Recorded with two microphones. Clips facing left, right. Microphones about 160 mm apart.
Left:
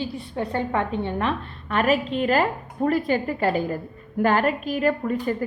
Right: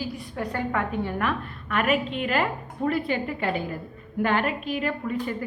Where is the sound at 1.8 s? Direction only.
40° left (ahead or behind).